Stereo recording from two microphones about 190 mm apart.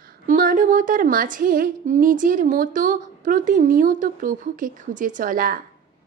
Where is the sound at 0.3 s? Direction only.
45° right (ahead or behind).